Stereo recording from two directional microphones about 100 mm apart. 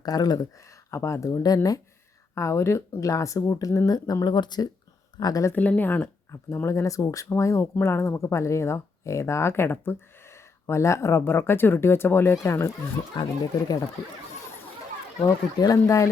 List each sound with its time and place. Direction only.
0.0 s speech: 40° left (ahead or behind)
0.9 s speech: 30° left (ahead or behind); by 4.7 s 45° left (ahead or behind)
5.2 s speech: 35° left (ahead or behind)
5.5 s speech: 15° left (ahead or behind)
6.3 s speech: 30° left (ahead or behind)
13.1 s speech: 40° left (ahead or behind)
15.2 s speech: 35° left (ahead or behind)